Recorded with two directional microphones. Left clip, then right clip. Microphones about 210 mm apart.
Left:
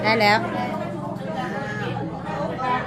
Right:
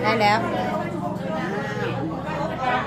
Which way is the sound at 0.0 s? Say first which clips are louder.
Left 1 dB; 20° left (ahead or behind).